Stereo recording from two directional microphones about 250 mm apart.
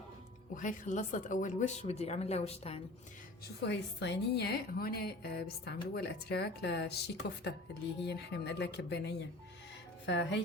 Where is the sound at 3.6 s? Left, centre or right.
Left.